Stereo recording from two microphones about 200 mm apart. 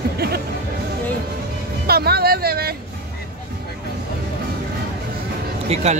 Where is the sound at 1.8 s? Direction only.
50° right (ahead or behind).